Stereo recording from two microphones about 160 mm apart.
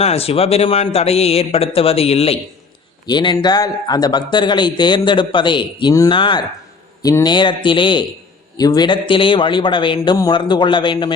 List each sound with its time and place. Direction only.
0.0 s a man's voice: 40° left (ahead or behind)